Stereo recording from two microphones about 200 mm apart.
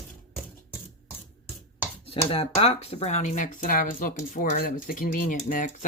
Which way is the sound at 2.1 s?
30° left (ahead or behind).